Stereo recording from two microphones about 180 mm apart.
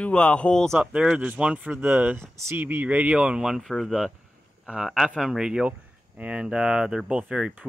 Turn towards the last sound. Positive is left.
turn(degrees=-5)  # may be behind; listen again after turning